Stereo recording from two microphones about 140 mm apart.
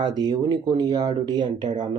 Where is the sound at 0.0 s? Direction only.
30° right (ahead or behind).